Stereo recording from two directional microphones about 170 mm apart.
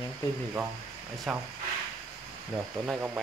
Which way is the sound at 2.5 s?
10° right (ahead or behind).